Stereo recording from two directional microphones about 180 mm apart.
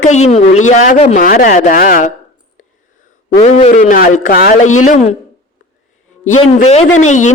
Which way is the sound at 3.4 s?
40° left (ahead or behind).